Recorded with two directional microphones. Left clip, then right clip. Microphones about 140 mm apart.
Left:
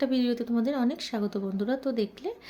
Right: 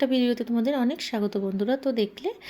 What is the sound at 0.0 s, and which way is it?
Speech, 10° right (ahead or behind).